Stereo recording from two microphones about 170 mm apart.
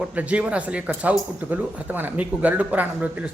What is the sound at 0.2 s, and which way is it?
A man's voice, 10° right (ahead or behind).